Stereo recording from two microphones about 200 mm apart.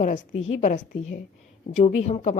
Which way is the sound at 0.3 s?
75° left (ahead or behind).